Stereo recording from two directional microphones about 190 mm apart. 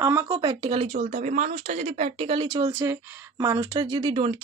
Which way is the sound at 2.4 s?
15° right (ahead or behind).